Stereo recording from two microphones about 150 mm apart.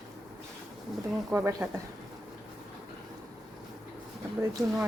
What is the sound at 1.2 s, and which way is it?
Speech, 10° right (ahead or behind).